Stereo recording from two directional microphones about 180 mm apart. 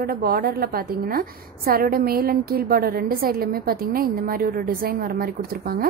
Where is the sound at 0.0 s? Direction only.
55° right (ahead or behind).